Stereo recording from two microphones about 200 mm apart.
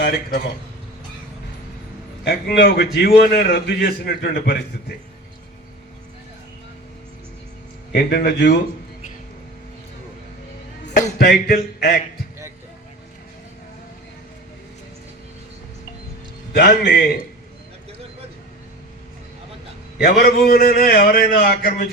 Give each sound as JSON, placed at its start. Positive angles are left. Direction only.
{"t": 0.0, "sound": "a man's voice", "side_deg": 50}
{"t": 2.2, "sound": "a man's voice", "side_deg": 55}
{"t": 7.9, "sound": "a man's voice", "side_deg": 55}
{"t": 11.2, "sound": "a man's voice", "side_deg": 50}
{"t": 16.5, "sound": "a man's voice", "side_deg": 55}
{"t": 20.0, "sound": "a man's voice", "side_deg": 50}